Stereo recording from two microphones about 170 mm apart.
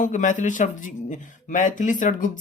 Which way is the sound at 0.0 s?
45° left (ahead or behind).